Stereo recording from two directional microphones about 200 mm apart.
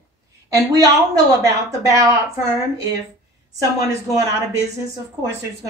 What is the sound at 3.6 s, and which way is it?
Speech, 15° right (ahead or behind).